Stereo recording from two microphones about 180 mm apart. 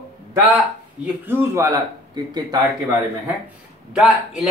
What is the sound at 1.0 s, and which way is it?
A man's voice, 10° right (ahead or behind).